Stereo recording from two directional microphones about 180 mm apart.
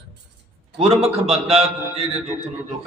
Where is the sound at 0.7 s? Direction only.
35° right (ahead or behind).